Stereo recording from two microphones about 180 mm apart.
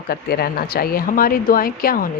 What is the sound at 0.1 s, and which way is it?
Speech, 60° left (ahead or behind).